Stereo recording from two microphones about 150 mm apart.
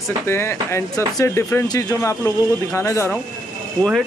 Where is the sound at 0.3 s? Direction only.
15° left (ahead or behind).